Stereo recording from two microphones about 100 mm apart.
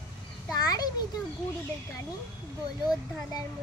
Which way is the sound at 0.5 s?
40° left (ahead or behind).